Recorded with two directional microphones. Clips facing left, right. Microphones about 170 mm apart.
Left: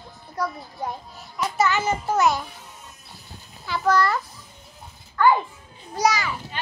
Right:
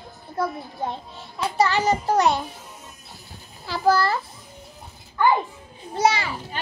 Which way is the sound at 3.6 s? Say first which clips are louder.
Right 1 dB; 35° right (ahead or behind).